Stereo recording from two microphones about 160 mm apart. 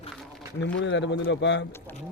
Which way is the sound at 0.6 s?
90° left.